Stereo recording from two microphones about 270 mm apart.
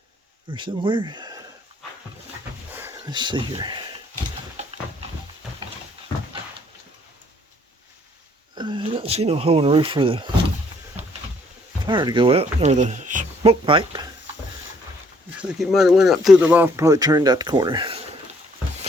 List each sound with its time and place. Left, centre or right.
0.5 s speech: centre
2.7 s a sound: centre
8.5 s speech: centre
11.9 s speech: centre
15.3 s speech: centre